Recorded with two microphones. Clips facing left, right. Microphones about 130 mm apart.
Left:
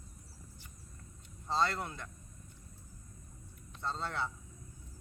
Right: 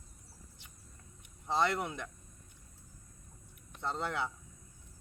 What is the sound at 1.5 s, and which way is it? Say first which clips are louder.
Speech: right 2 dB; 15° right (ahead or behind).